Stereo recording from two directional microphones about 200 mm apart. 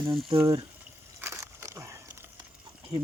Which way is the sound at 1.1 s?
15° right (ahead or behind).